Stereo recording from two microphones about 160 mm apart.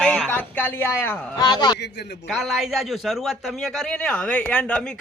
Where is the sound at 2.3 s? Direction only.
Centre (ahead or behind).